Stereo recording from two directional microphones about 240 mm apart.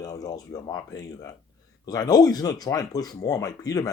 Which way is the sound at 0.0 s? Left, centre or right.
Centre.